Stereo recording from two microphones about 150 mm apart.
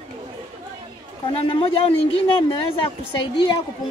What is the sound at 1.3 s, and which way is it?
A woman's voice, 40° left (ahead or behind).